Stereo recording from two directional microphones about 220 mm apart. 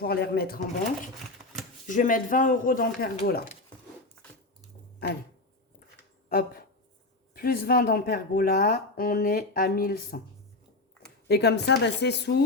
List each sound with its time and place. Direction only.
0.0 s speech: 45° left (ahead or behind)
1.9 s speech: 35° left (ahead or behind)
5.0 s speech: 45° left (ahead or behind)
6.2 s a sound: 40° left (ahead or behind)
7.3 s speech: 45° left (ahead or behind)
11.3 s speech: 50° left (ahead or behind)